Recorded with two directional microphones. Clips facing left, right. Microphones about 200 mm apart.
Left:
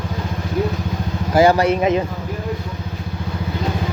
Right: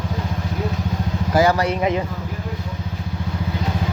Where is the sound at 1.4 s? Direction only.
25° left (ahead or behind).